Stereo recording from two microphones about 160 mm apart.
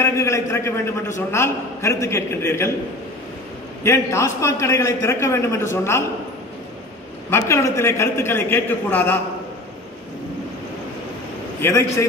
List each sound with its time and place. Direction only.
0.0 s a man's voice: 20° left (ahead or behind)
3.8 s a man's voice: 20° left (ahead or behind)
7.2 s a man's voice: 15° left (ahead or behind)
11.6 s a man's voice: 20° left (ahead or behind)